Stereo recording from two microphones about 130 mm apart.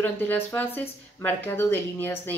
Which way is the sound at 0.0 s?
15° left (ahead or behind).